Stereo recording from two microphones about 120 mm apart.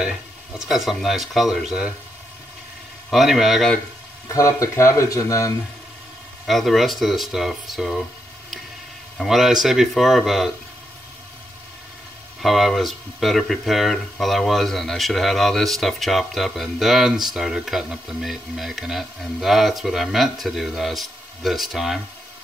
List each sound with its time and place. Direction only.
0.6 s speech: centre (ahead or behind)
3.1 s speech: centre (ahead or behind)
4.3 s speech: 25° left (ahead or behind)
6.4 s speech: centre (ahead or behind)
9.2 s speech: centre (ahead or behind)
12.4 s speech: centre (ahead or behind)